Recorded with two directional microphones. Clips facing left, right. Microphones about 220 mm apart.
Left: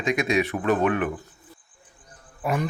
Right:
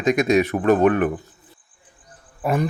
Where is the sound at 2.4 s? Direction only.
40° right (ahead or behind).